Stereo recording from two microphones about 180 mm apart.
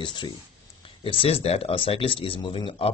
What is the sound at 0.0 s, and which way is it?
Speech, 25° left (ahead or behind).